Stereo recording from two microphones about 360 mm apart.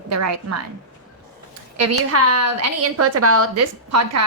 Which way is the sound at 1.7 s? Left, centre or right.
Right.